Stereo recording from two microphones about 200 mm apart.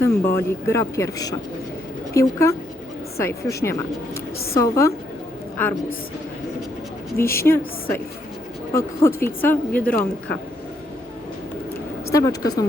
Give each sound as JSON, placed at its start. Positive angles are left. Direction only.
{"t": 0.0, "sound": "speech", "side_deg": 10}
{"t": 7.2, "sound": "speech", "side_deg": 10}
{"t": 9.0, "sound": "speech", "side_deg": 10}
{"t": 12.1, "sound": "speech", "side_deg": 15}